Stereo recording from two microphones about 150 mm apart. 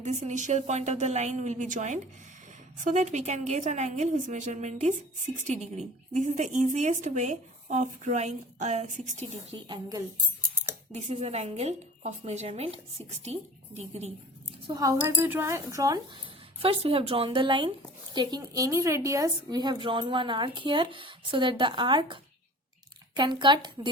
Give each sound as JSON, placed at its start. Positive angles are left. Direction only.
{"t": 0.0, "sound": "a woman's voice", "side_deg": -50}
{"t": 9.6, "sound": "speech", "side_deg": -30}
{"t": 10.9, "sound": "a woman's voice", "side_deg": -45}
{"t": 14.7, "sound": "speech", "side_deg": -25}
{"t": 16.1, "sound": "speech", "side_deg": -40}